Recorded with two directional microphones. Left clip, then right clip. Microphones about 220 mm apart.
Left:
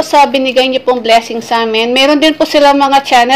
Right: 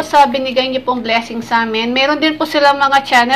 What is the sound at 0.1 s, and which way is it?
A woman's voice, 30° left (ahead or behind).